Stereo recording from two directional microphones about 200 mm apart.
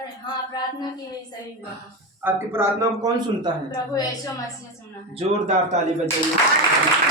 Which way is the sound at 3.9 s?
20° left (ahead or behind).